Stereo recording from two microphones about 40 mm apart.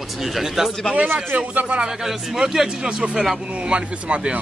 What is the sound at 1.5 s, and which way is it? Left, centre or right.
Speech, right.